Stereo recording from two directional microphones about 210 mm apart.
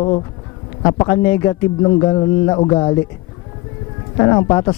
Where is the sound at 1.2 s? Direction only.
15° left (ahead or behind).